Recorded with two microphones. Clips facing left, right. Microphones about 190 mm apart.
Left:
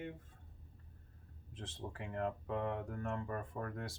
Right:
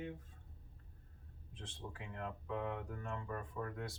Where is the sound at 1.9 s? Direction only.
55° left (ahead or behind).